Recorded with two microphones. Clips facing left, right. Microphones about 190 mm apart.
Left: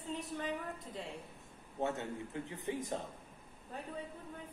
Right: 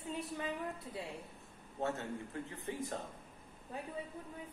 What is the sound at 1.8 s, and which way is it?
A man's voice, 15° left (ahead or behind).